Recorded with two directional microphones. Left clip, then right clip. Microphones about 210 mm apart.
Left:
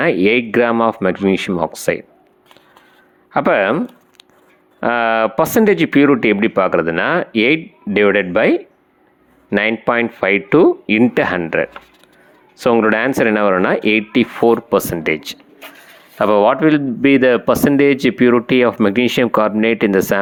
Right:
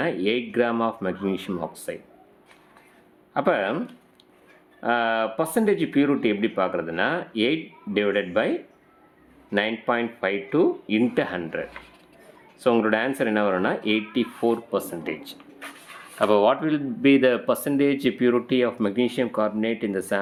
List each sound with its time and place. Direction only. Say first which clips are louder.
0.0 s speech: left 11 dB; 35° left (ahead or behind)
3.3 s speech: left 9 dB; 35° left (ahead or behind)